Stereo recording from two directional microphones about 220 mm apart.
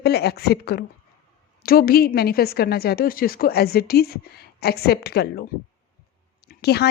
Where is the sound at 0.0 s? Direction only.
45° left (ahead or behind).